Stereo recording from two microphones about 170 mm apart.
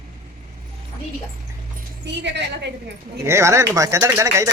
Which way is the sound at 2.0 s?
90° right.